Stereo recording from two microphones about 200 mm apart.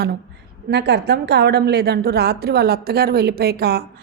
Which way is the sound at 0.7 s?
55° right (ahead or behind).